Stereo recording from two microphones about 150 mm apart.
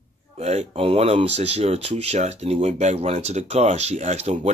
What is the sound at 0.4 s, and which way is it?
Speech, 45° right (ahead or behind).